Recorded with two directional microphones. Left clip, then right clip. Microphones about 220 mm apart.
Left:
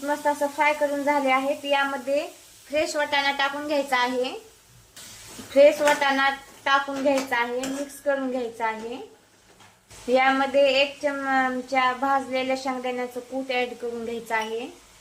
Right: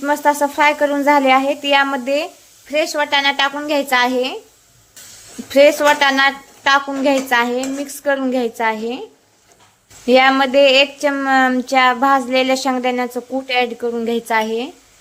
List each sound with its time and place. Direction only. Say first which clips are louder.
0.0 s speech: right 9 dB; 50° right (ahead or behind)
2.7 s a woman's voice: right 7 dB; 35° right (ahead or behind)
5.5 s speech: right 6 dB; 50° right (ahead or behind)
10.1 s speech: right 8 dB; 45° right (ahead or behind)
13.5 s a woman's voice: right 9 dB; 40° right (ahead or behind)